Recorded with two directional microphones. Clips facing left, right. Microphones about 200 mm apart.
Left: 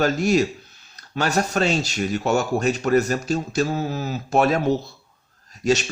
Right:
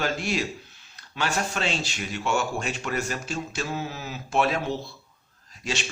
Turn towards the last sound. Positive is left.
turn(degrees=40)  # may be behind; listen again after turning